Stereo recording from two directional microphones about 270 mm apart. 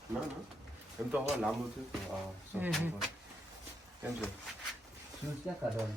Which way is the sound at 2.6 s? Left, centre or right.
Centre.